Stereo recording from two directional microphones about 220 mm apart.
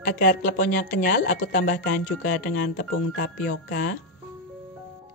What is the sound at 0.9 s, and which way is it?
Speech, 40° left (ahead or behind).